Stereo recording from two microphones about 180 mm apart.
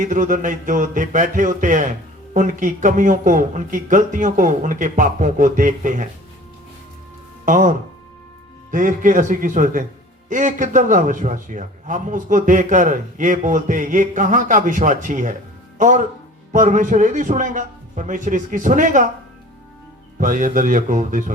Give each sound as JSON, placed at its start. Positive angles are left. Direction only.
{"t": 0.1, "sound": "a man's voice", "side_deg": -45}
{"t": 7.4, "sound": "a man's voice", "side_deg": -45}
{"t": 20.1, "sound": "a man's voice", "side_deg": -45}